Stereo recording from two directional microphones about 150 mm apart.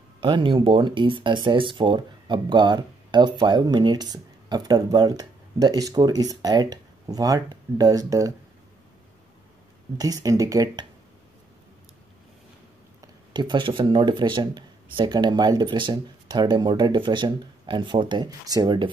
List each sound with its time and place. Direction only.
0.2 s speech: 35° right (ahead or behind)
9.9 s speech: 25° right (ahead or behind)
13.0 s speech: 30° right (ahead or behind)